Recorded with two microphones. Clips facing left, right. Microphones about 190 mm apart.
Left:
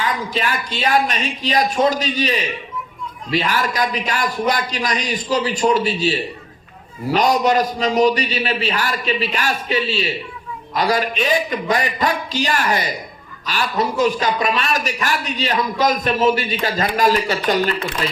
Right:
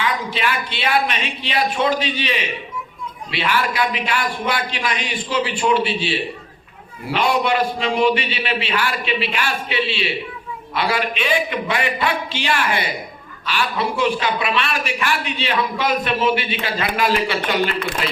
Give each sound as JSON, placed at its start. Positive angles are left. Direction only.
{"t": 0.0, "sound": "a woman's voice", "side_deg": 40}